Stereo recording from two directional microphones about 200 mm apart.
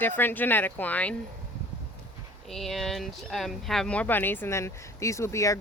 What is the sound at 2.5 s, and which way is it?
Speech, centre (ahead or behind).